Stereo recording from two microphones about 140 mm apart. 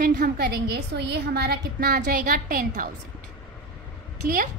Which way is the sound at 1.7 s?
90° right.